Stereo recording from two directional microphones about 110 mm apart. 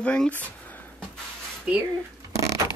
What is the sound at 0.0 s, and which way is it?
Speech, 10° left (ahead or behind).